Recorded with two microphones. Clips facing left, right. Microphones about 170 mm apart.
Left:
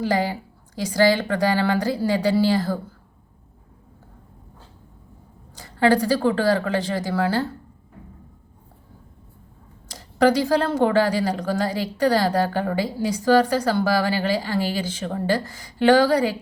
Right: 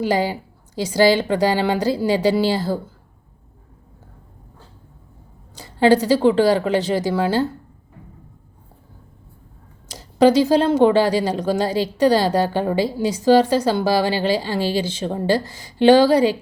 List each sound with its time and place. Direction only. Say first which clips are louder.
0.1 s a woman's voice: right 3 dB; 25° right (ahead or behind)
5.5 s a woman's voice: right 3 dB; 25° right (ahead or behind)
10.0 s a sound: right 4 dB; 25° right (ahead or behind)
10.4 s a woman's voice: right 5 dB; 25° right (ahead or behind)